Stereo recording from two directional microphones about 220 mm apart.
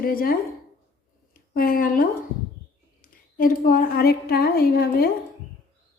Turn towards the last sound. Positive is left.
turn(degrees=45)  # may be behind; listen again after turning